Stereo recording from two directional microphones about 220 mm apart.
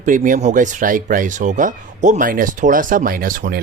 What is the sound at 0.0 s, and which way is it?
Speech, 35° right (ahead or behind).